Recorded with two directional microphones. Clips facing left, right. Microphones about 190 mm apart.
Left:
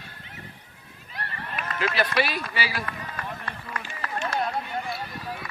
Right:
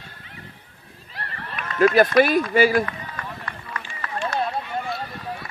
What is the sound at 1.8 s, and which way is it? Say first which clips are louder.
Speech: right 10 dB; 45° right (ahead or behind).